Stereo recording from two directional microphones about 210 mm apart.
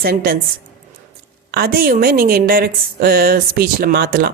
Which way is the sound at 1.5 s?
50° right (ahead or behind).